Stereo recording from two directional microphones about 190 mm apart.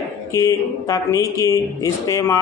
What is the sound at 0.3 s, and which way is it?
Speech, 15° left (ahead or behind).